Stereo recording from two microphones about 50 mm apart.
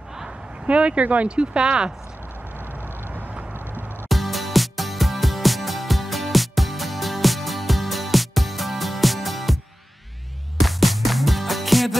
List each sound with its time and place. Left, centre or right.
0.7 s speech: right
3.0 s vehicle: right
4.1 s music: centre
10.6 s music: centre